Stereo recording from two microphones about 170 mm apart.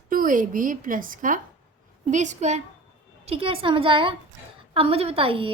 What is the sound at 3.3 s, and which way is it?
A woman's voice, 35° right (ahead or behind).